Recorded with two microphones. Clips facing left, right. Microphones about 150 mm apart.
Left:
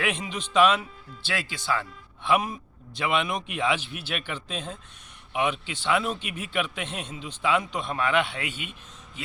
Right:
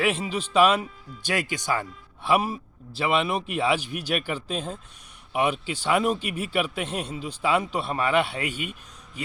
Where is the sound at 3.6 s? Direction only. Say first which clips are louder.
Right 1 dB; 40° right (ahead or behind).